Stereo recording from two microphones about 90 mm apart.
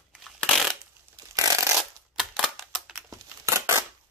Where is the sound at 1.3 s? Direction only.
40° right (ahead or behind).